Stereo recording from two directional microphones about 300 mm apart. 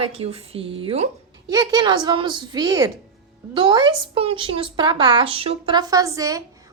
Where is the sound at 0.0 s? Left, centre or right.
Centre.